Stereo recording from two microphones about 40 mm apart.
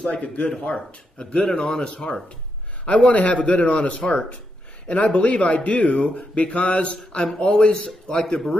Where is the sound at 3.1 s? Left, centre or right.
Left.